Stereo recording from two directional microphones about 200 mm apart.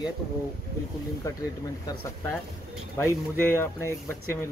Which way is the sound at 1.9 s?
10° left (ahead or behind).